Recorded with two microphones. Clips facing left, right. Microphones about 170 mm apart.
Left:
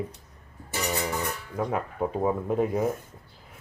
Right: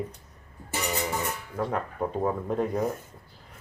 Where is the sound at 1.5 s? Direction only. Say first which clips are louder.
Left 1 dB; 10° left (ahead or behind).